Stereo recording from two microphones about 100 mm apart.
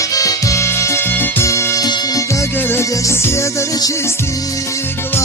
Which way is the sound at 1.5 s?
30° left (ahead or behind).